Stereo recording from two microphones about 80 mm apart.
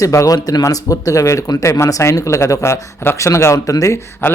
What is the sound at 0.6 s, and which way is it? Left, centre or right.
Speech, left.